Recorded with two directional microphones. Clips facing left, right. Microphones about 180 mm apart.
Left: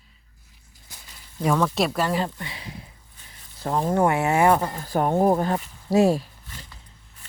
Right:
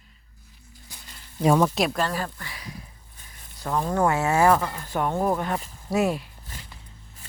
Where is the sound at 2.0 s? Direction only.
20° left (ahead or behind).